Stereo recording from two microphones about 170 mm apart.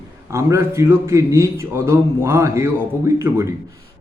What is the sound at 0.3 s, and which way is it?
A man's voice, 15° right (ahead or behind).